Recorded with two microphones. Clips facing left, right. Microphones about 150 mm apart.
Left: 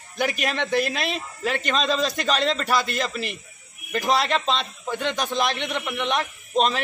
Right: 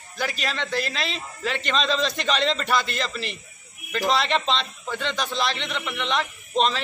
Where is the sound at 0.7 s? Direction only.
55° left (ahead or behind).